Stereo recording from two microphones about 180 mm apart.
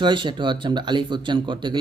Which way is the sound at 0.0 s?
25° right (ahead or behind).